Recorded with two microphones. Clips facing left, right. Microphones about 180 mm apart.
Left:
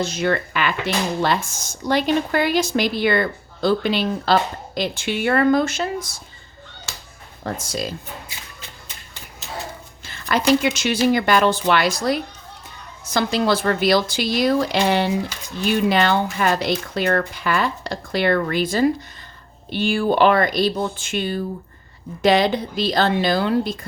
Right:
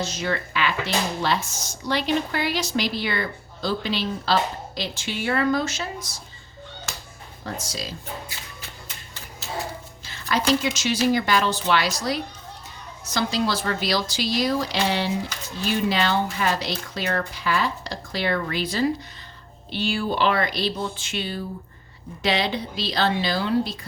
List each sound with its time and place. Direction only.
0.0 s a woman's voice: 60° left (ahead or behind)
7.4 s a woman's voice: 55° left (ahead or behind)
10.0 s a woman's voice: 55° left (ahead or behind)